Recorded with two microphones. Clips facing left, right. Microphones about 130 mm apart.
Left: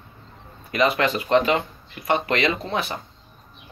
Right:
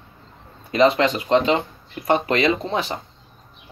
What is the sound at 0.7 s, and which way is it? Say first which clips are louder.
Speech: right 4 dB; 30° right (ahead or behind).